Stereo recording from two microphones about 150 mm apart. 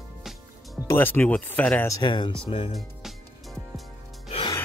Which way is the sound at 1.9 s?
30° left (ahead or behind).